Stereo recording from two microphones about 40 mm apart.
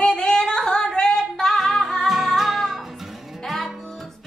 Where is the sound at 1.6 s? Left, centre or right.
Centre.